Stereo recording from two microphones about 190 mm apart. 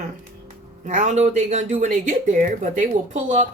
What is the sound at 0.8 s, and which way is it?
A woman's voice, 40° right (ahead or behind).